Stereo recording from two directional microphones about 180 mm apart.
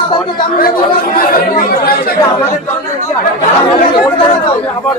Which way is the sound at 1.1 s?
55° left (ahead or behind).